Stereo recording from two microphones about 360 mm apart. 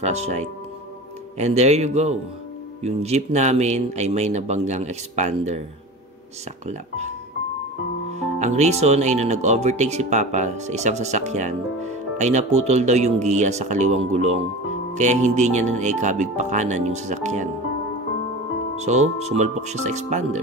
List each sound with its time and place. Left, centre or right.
0.0 s speech: centre
6.7 s speech: centre
18.8 s speech: centre